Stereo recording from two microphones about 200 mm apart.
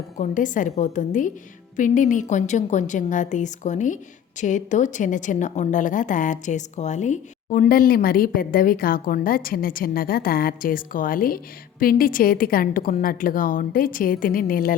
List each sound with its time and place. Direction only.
0.2 s a woman's voice: 40° left (ahead or behind)